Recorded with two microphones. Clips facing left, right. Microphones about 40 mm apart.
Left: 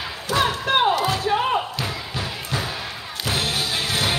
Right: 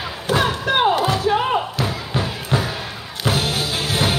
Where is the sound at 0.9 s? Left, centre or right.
Right.